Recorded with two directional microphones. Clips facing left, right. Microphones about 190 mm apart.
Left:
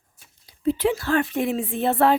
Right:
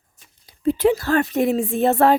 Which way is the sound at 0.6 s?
40° right (ahead or behind).